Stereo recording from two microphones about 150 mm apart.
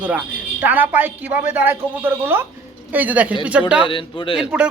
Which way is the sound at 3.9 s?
35° left (ahead or behind).